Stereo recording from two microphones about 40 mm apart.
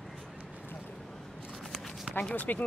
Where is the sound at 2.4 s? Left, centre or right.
Left.